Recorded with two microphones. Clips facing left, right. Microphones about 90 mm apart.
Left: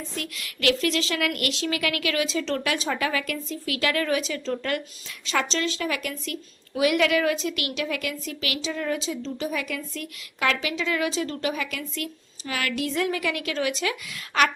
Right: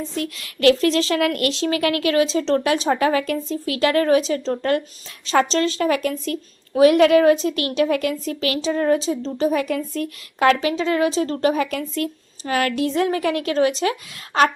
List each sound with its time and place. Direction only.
0.2 s speech: 35° right (ahead or behind)